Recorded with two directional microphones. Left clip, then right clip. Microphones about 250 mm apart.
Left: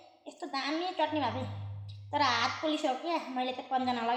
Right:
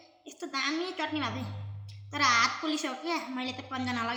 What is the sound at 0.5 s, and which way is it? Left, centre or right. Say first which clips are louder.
A child's voice: right 1 dB; centre.